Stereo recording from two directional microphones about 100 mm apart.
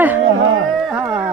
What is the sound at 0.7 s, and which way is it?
Carnatic music, centre (ahead or behind).